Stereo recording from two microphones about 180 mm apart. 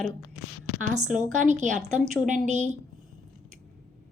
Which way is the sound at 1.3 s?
40° right (ahead or behind).